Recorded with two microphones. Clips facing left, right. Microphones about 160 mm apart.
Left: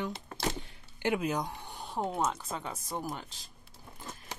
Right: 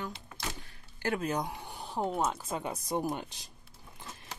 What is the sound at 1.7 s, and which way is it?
Speech, centre (ahead or behind).